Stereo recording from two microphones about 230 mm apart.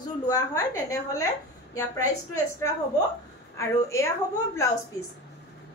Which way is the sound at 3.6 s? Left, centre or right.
Centre.